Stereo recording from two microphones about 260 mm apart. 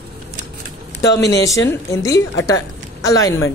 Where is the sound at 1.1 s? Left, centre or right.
Left.